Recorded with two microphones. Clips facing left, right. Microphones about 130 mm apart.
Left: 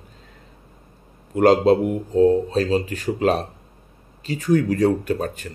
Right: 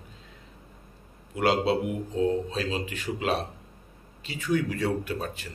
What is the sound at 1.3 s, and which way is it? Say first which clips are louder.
Speech: left 9 dB; 45° left (ahead or behind).